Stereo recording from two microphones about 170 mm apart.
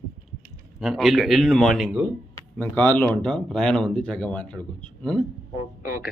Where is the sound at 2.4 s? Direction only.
10° left (ahead or behind).